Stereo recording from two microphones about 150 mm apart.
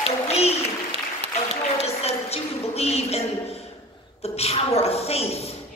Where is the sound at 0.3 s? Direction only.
45° left (ahead or behind).